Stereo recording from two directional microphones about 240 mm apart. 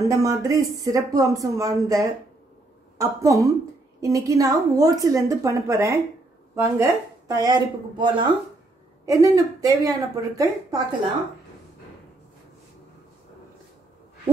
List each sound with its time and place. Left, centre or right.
0.1 s a woman's voice: centre